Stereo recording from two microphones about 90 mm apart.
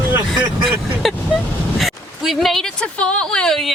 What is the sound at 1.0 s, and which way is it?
Vehicle, centre (ahead or behind).